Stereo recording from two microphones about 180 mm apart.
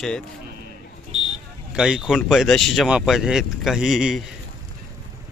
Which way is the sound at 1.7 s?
5° right (ahead or behind).